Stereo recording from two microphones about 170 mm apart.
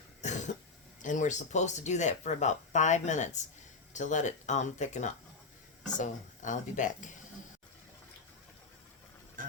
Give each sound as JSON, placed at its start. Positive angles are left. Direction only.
{"t": 0.2, "sound": "cough", "side_deg": 45}
{"t": 1.0, "sound": "speech", "side_deg": 45}
{"t": 9.4, "sound": "a sound", "side_deg": -50}